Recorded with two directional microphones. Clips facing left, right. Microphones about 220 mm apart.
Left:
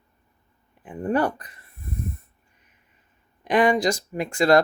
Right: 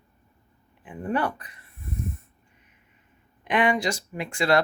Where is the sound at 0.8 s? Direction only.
40° left (ahead or behind).